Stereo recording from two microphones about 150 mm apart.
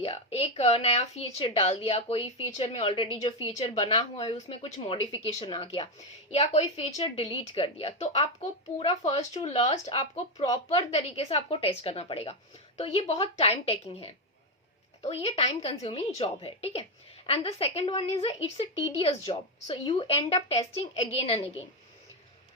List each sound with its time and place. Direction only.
0.0 s a woman's voice: 40° left (ahead or behind)